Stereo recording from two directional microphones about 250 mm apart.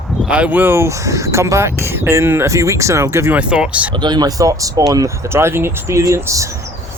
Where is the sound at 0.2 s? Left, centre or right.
Centre.